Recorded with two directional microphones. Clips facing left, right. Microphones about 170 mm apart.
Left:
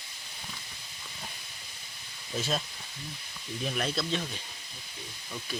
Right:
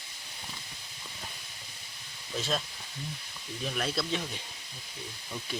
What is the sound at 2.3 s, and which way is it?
Speech, 5° left (ahead or behind).